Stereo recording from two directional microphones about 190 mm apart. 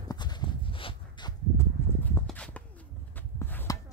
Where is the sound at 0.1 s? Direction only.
20° left (ahead or behind).